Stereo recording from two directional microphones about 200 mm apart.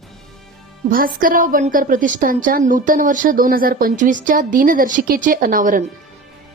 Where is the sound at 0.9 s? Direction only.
45° right (ahead or behind).